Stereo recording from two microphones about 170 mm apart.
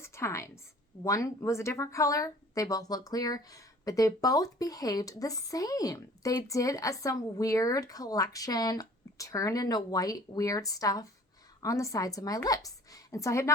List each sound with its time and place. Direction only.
0.0 s a woman's voice: 15° left (ahead or behind)